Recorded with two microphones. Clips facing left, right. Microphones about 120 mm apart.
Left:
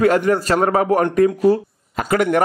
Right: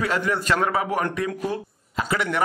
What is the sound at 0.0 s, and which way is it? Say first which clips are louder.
A man's voice: left 9 dB; 45° left (ahead or behind).